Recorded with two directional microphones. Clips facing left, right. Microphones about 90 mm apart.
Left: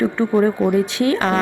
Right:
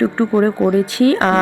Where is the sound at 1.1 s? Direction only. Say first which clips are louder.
Right 4 dB; 35° right (ahead or behind).